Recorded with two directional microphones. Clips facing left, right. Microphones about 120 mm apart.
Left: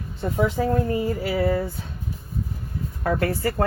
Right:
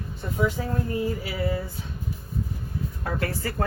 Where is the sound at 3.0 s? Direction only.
45° left (ahead or behind).